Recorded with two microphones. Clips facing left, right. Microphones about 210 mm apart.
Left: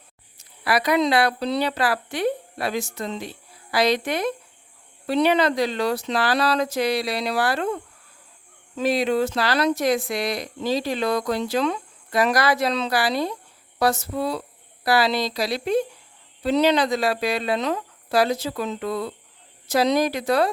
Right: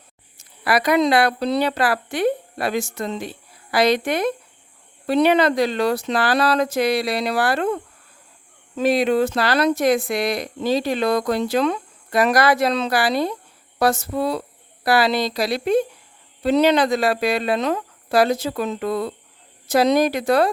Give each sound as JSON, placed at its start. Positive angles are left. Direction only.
{"t": 0.3, "sound": "speech", "side_deg": -50}
{"t": 8.8, "sound": "speech", "side_deg": -60}